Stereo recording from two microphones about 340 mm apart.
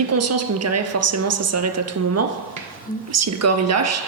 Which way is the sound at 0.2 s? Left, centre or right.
Right.